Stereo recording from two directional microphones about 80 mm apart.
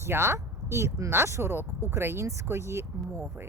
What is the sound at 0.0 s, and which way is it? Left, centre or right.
Speech, right.